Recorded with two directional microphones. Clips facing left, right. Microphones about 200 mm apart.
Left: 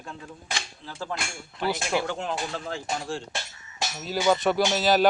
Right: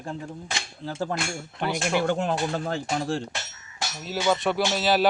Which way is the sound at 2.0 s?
50° right (ahead or behind).